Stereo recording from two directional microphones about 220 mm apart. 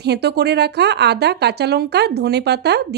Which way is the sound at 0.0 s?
50° right (ahead or behind).